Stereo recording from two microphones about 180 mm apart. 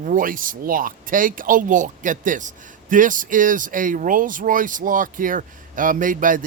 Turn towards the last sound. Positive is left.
turn(degrees=-50)  # may be behind; listen again after turning